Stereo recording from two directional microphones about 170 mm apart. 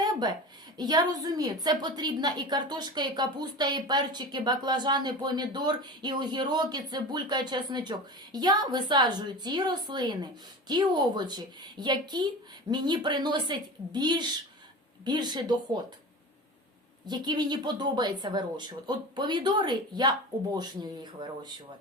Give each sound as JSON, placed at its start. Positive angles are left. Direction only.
{"t": 0.0, "sound": "a sound", "side_deg": -25}
{"t": 0.8, "sound": "a woman's voice", "side_deg": -25}
{"t": 17.1, "sound": "a woman's voice", "side_deg": -25}